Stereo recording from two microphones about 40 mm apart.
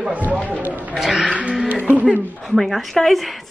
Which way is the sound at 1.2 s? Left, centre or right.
Right.